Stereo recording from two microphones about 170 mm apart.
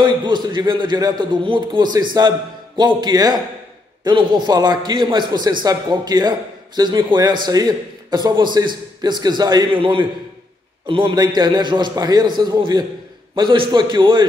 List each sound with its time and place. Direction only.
0.0 s a man's voice: 25° right (ahead or behind)